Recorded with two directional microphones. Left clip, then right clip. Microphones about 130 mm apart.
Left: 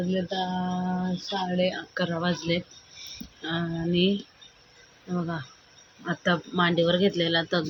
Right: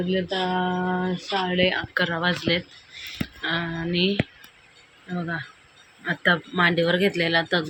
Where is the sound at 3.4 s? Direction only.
10° left (ahead or behind).